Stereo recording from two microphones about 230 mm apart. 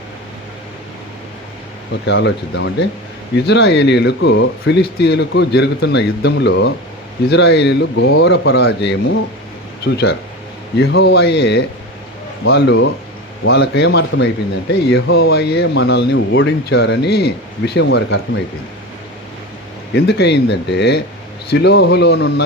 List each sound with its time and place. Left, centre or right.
2.0 s speech: left
19.9 s speech: left